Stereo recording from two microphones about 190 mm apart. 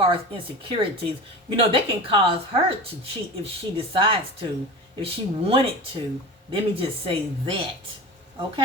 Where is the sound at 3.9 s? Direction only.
30° right (ahead or behind).